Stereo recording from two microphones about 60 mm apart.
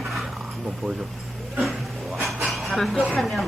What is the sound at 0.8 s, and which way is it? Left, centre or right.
Speech, centre.